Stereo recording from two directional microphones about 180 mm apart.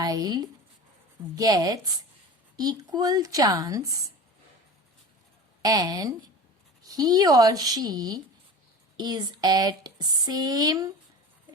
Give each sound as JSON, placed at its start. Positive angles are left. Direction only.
{"t": 0.0, "sound": "speech", "side_deg": -20}
{"t": 5.6, "sound": "speech", "side_deg": -20}